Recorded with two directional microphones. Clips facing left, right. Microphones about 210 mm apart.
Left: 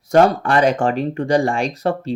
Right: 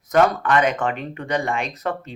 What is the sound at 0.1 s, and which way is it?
Speech, 30° left (ahead or behind).